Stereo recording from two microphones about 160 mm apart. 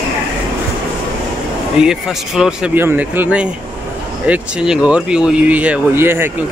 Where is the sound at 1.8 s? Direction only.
5° right (ahead or behind).